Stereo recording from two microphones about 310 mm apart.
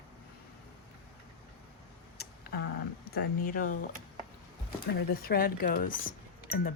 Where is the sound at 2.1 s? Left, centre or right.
Left.